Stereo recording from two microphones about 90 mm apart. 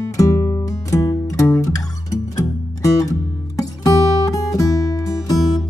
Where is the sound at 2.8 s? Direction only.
40° left (ahead or behind).